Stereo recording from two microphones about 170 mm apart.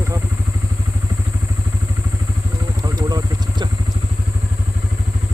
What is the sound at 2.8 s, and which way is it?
Vehicle, 20° right (ahead or behind).